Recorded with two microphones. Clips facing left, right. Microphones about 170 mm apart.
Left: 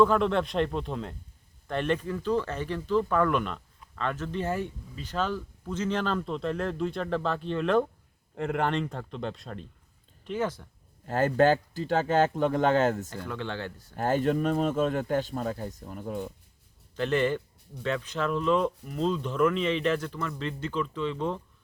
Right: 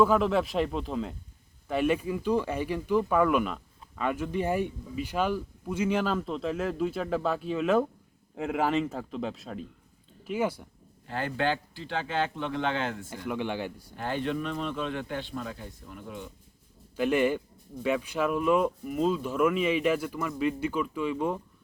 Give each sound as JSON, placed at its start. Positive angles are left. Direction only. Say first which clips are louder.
{"t": 0.0, "sound": "a man's voice", "louder": "even", "side_deg": -5}
{"t": 11.0, "sound": "speech", "louder": "left 7 dB", "side_deg": 45}
{"t": 13.1, "sound": "speech", "louder": "right 3 dB", "side_deg": -15}
{"t": 13.9, "sound": "speech", "louder": "left 6 dB", "side_deg": 45}
{"t": 17.0, "sound": "speech", "louder": "right 1 dB", "side_deg": -10}